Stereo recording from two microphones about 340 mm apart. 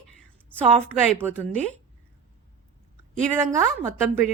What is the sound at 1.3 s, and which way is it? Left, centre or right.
Speech, centre.